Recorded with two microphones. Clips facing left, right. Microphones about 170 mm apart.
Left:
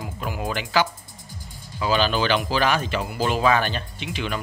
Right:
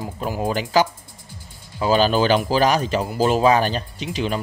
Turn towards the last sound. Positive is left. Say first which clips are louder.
# right 5 dB
turn(degrees=-35)  # may be behind; listen again after turning